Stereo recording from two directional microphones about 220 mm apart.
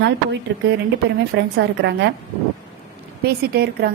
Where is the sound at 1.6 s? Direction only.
50° right (ahead or behind).